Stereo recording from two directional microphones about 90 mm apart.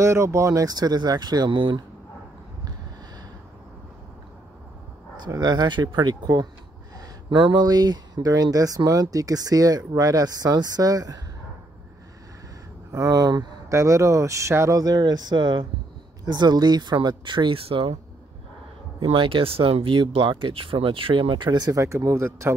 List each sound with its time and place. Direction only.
0.0 s speech: 30° right (ahead or behind); by 1.8 s 60° right (ahead or behind)
5.2 s speech: 50° right (ahead or behind)
7.2 s speech: 60° right (ahead or behind); by 11.1 s 45° right (ahead or behind)
12.9 s speech: 45° right (ahead or behind)
13.7 s speech: 35° right (ahead or behind); by 17.9 s 80° right
18.9 s speech: 80° right
21.5 s speech: 45° right (ahead or behind)